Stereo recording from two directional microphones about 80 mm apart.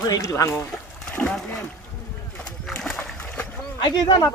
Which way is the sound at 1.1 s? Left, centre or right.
Centre.